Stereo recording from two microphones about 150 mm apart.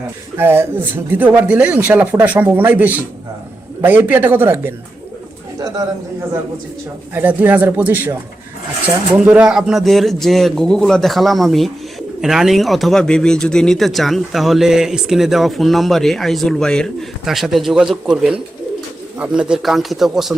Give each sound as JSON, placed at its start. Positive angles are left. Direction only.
{"t": 0.3, "sound": "speech", "side_deg": -15}
{"t": 5.5, "sound": "bird", "side_deg": -25}
{"t": 7.1, "sound": "speech", "side_deg": -10}
{"t": 9.1, "sound": "speech", "side_deg": -5}